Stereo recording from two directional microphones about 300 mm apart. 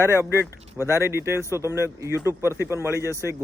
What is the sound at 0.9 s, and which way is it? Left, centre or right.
A man's voice, centre.